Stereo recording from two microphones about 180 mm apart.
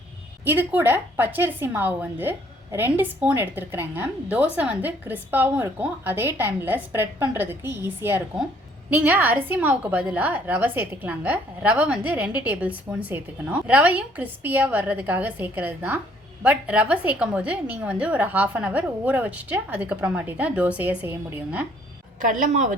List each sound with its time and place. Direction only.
0.4 s a woman's voice: 10° right (ahead or behind)
22.2 s a woman's voice: 45° right (ahead or behind)